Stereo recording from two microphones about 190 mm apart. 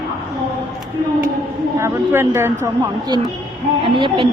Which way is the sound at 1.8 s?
15° right (ahead or behind).